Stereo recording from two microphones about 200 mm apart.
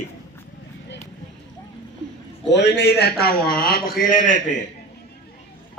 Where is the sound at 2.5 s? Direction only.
60° left (ahead or behind); by 4.4 s 40° left (ahead or behind).